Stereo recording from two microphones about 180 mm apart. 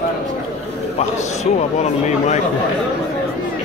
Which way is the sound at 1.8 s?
40° left (ahead or behind).